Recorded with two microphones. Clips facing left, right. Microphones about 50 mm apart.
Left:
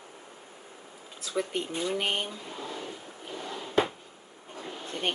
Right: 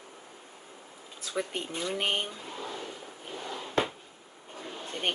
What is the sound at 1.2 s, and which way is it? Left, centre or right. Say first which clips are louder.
Speech: left 2 dB; centre.